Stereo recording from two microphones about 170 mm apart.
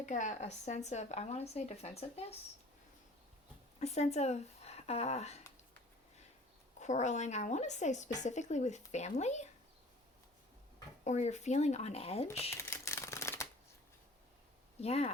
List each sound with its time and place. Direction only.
0.0 s speech: 45° left (ahead or behind)
3.8 s speech: 40° left (ahead or behind)
6.7 s a woman's voice: 45° left (ahead or behind)
11.0 s speech: 45° left (ahead or behind)
12.5 s shuffling cards: 15° left (ahead or behind)
14.8 s speech: 35° left (ahead or behind)